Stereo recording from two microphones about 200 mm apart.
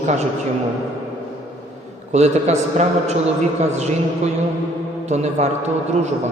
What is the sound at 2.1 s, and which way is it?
A man's voice, 35° right (ahead or behind).